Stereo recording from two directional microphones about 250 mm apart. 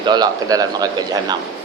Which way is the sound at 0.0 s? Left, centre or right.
Centre.